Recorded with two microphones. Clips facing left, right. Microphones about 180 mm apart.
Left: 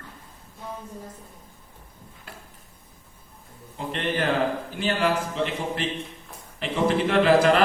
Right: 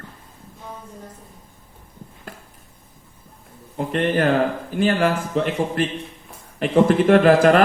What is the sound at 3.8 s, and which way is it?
A man's voice, 50° right (ahead or behind).